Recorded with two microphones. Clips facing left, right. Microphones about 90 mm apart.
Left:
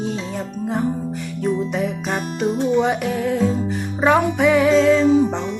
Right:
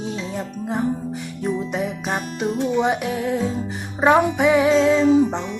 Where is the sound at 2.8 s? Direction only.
15° right (ahead or behind).